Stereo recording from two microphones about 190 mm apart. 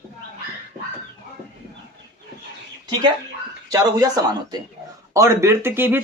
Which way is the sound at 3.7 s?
20° right (ahead or behind).